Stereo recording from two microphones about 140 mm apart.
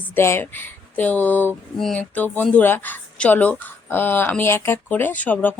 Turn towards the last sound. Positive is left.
turn(degrees=10)  # may be behind; listen again after turning